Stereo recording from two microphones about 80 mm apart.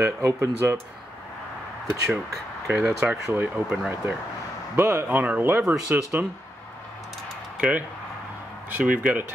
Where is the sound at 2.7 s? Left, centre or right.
Right.